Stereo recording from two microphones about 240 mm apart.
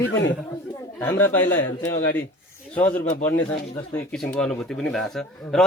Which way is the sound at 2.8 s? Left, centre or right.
Left.